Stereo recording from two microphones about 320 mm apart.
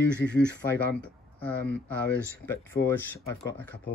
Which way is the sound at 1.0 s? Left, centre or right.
Centre.